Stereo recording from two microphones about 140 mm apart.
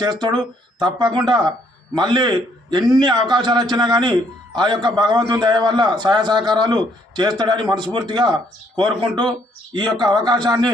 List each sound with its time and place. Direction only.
0.0 s a man's voice: 30° right (ahead or behind)